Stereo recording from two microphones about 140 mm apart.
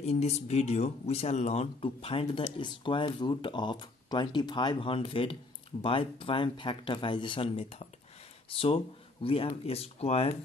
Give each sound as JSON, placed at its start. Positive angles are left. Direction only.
{"t": 0.0, "sound": "speech", "side_deg": 50}